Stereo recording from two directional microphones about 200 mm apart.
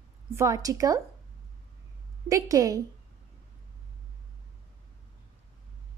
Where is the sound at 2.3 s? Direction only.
15° right (ahead or behind).